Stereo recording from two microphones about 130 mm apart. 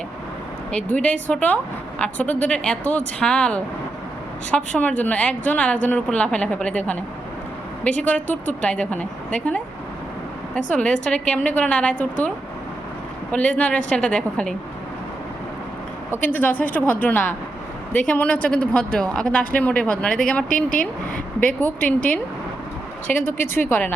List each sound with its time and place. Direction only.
0.7 s speech: 10° left (ahead or behind)
8.0 s speech: 10° left (ahead or behind)
10.7 s speech: 10° left (ahead or behind)
13.3 s speech: 10° left (ahead or behind)
16.1 s speech: 15° left (ahead or behind)
21.4 s speech: 15° left (ahead or behind)
23.0 s speech: 15° left (ahead or behind)